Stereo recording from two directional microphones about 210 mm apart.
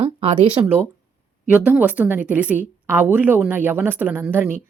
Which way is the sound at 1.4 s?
10° right (ahead or behind).